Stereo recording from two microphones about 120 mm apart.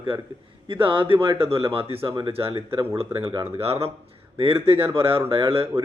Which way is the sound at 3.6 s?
55° right (ahead or behind).